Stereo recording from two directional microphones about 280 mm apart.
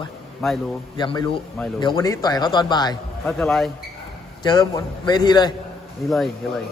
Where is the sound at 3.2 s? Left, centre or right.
Centre.